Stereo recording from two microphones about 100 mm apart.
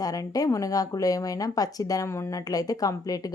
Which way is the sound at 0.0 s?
40° left (ahead or behind).